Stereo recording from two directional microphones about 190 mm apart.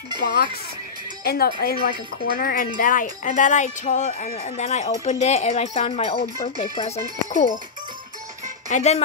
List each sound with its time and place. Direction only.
0.2 s speech: 55° left (ahead or behind); by 6.9 s 30° left (ahead or behind)
8.6 s speech: 35° left (ahead or behind)